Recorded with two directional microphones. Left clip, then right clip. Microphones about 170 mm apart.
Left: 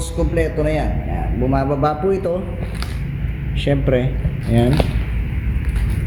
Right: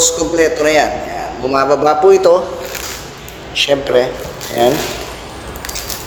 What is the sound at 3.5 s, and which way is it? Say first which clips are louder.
Speech: right 7 dB; 10° right (ahead or behind).